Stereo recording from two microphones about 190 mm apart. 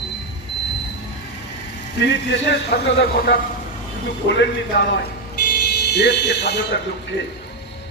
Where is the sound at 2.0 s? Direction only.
65° left (ahead or behind).